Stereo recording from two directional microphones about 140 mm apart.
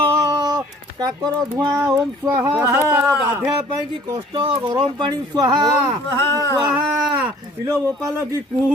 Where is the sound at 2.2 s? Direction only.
15° right (ahead or behind).